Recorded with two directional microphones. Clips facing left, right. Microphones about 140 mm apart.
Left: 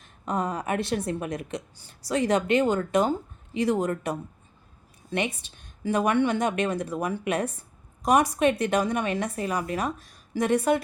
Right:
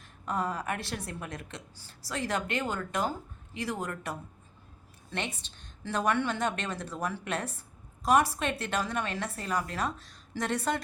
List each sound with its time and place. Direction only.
0.0 s a woman's voice: 20° left (ahead or behind)